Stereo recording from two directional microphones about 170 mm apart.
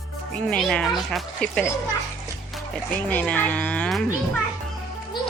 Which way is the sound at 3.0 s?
10° left (ahead or behind).